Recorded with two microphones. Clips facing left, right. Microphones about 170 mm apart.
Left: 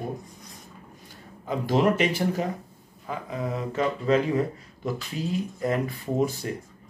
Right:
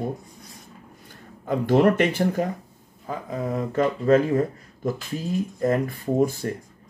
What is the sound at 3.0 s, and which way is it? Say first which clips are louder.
Speech: right 2 dB; 45° right (ahead or behind).